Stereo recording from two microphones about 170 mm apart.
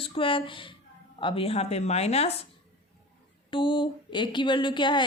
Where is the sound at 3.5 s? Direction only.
30° left (ahead or behind).